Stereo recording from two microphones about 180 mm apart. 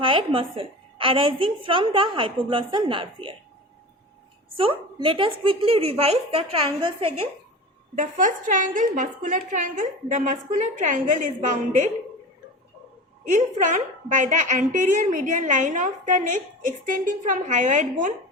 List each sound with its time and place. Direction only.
0.0 s a woman's voice: 30° right (ahead or behind)
4.5 s speech: 30° right (ahead or behind)
7.9 s a woman's voice: 45° right (ahead or behind)
13.2 s a woman's voice: 45° right (ahead or behind)